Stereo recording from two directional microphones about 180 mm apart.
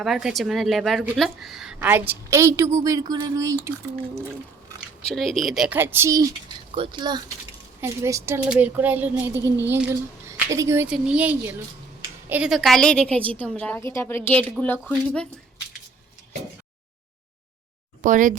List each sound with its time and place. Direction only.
0.0 s a woman's voice: centre (ahead or behind); by 3.7 s 15° right (ahead or behind)
5.0 s speech: centre (ahead or behind); by 6.2 s 15° right (ahead or behind)
6.7 s a woman's voice: 30° right (ahead or behind); by 15.3 s 5° left (ahead or behind)
18.0 s speech: 45° right (ahead or behind)